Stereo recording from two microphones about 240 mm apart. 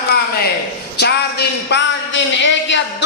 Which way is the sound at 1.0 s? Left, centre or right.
Left.